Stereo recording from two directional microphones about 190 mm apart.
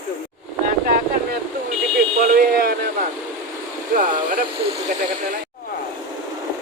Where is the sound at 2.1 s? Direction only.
50° right (ahead or behind).